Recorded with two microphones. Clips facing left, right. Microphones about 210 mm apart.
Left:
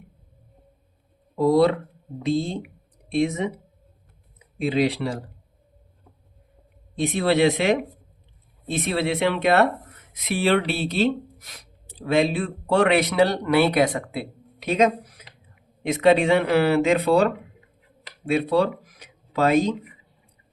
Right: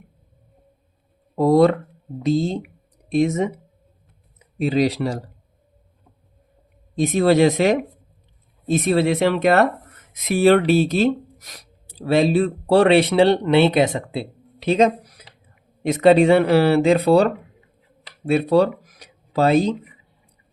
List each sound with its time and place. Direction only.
1.4 s speech: 50° right (ahead or behind)
4.5 s speech: 40° right (ahead or behind)
7.0 s speech: 40° right (ahead or behind)
15.8 s speech: 40° right (ahead or behind)
18.3 s speech: 40° right (ahead or behind)